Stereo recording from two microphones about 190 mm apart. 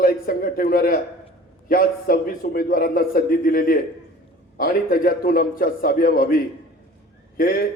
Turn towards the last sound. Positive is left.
turn(degrees=50)  # may be behind; listen again after turning